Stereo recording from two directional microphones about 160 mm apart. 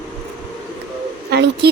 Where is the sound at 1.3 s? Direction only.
90° right.